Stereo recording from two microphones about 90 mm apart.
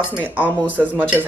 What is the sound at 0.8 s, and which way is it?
Speech, 20° right (ahead or behind).